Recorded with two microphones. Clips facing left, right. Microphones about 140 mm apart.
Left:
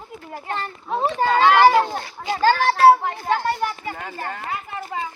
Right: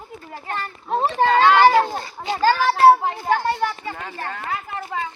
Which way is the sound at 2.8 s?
20° right (ahead or behind).